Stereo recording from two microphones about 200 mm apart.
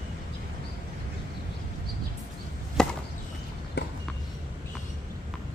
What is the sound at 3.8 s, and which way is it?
Walk, 60° left (ahead or behind).